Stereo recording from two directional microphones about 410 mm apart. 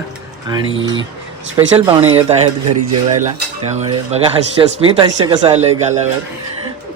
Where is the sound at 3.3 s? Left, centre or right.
Centre.